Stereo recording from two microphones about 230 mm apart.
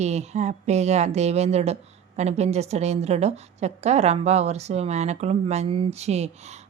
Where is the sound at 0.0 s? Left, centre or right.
Right.